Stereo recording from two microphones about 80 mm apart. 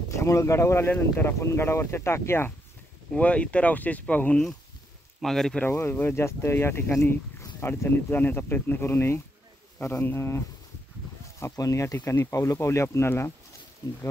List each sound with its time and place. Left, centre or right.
0.1 s speech: left
3.2 s speech: centre
5.2 s speech: centre
5.7 s speech: left